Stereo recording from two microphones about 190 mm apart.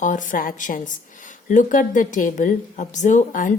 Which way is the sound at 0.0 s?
40° left (ahead or behind).